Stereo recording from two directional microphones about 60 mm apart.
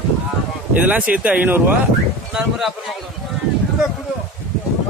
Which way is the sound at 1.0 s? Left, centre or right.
Centre.